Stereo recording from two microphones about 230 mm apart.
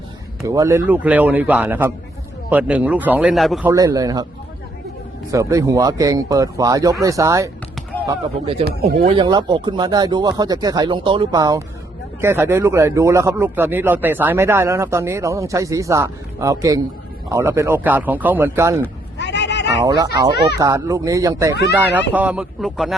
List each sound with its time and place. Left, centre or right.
0.4 s a man's voice: centre
3.7 s speech: centre
5.3 s speech: centre
19.1 s a sound: left
20.6 s a man's voice: centre